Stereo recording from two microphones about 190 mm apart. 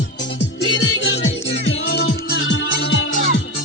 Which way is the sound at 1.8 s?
65° left (ahead or behind).